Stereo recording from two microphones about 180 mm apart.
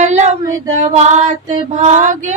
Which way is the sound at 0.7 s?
40° right (ahead or behind).